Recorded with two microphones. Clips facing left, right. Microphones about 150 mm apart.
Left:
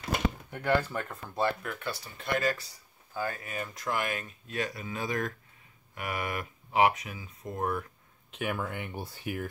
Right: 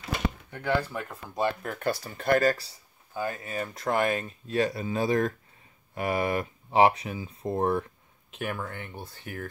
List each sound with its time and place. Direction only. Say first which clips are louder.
0.5 s speech: even; 5° left (ahead or behind)
0.9 s speech: even; 5° right (ahead or behind)
1.6 s speech: right 7 dB; 40° right (ahead or behind)
3.2 s speech: right 3 dB; 20° right (ahead or behind)
8.3 s speech: even; 5° left (ahead or behind)